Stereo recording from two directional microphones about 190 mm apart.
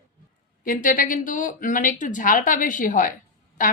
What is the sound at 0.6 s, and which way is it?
A woman's voice, 45° left (ahead or behind).